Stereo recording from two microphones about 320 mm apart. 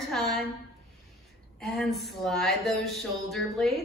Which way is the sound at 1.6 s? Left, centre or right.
Centre.